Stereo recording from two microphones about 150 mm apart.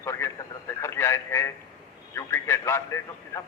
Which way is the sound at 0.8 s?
15° left (ahead or behind).